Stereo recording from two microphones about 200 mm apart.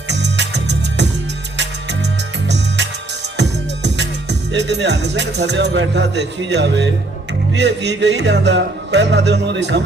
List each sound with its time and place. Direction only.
0.1 s music: 60° right (ahead or behind)
3.8 s music: 60° right (ahead or behind)